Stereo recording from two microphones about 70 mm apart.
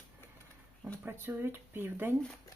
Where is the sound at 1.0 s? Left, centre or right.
Right.